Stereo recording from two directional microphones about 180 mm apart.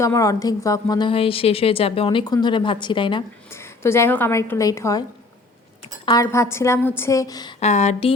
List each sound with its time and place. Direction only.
0.0 s a woman's voice: 15° left (ahead or behind)
3.5 s a woman's voice: 15° left (ahead or behind)
6.1 s a woman's voice: 20° left (ahead or behind)
7.6 s speech: 40° left (ahead or behind)